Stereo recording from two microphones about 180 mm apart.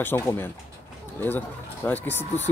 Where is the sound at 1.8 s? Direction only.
10° left (ahead or behind).